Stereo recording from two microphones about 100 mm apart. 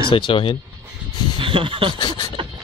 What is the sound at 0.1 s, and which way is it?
Speech, 55° left (ahead or behind).